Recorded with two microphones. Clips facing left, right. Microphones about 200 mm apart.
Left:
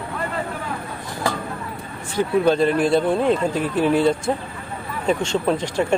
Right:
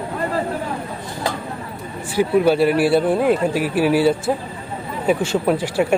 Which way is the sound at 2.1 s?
10° right (ahead or behind).